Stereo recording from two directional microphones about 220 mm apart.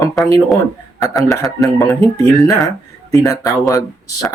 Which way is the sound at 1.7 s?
10° left (ahead or behind).